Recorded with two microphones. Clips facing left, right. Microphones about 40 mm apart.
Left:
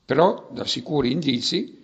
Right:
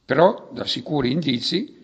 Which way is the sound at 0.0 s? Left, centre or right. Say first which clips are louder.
Right 2 dB; centre.